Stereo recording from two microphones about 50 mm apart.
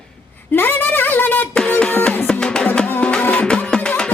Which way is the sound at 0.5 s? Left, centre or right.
Left.